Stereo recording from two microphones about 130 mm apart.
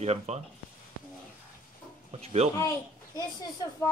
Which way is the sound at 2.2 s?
55° right (ahead or behind).